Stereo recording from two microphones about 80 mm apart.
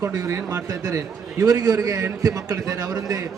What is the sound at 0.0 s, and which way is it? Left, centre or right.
A man's voice, right.